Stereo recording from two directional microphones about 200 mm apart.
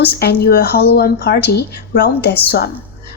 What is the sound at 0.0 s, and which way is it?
Speech, 50° left (ahead or behind).